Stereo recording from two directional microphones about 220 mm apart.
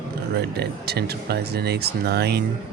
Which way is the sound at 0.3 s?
50° right (ahead or behind).